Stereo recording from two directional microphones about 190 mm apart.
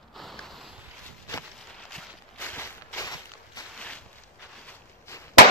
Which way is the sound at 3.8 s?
5° left (ahead or behind).